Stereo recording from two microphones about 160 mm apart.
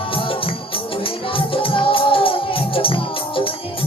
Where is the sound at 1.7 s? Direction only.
35° left (ahead or behind).